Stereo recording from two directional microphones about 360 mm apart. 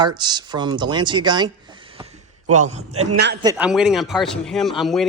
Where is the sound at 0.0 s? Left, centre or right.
Centre.